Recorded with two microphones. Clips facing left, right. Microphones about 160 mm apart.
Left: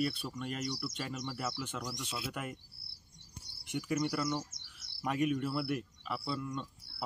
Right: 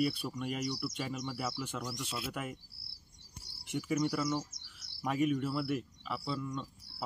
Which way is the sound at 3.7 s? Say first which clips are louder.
Right 1 dB; centre (ahead or behind).